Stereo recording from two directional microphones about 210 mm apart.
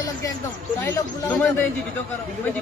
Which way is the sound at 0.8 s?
10° left (ahead or behind).